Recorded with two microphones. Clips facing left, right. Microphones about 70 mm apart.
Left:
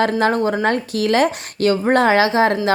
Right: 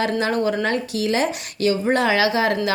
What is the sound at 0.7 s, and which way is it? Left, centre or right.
A woman's voice, left.